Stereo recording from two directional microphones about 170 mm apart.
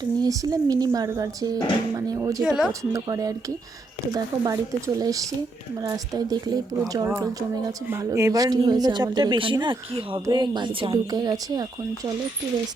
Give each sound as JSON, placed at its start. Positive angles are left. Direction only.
{"t": 0.0, "sound": "speech", "side_deg": -25}
{"t": 2.4, "sound": "speech", "side_deg": 0}
{"t": 2.9, "sound": "speech", "side_deg": -20}